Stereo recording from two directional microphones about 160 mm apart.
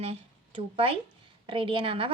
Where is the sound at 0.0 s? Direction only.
35° right (ahead or behind).